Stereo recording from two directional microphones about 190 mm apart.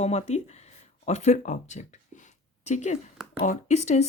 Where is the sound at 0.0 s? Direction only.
35° left (ahead or behind).